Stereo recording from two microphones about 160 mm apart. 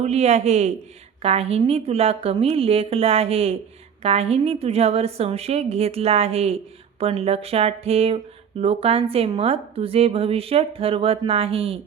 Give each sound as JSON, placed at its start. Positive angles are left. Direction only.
{"t": 0.0, "sound": "a man's voice", "side_deg": -40}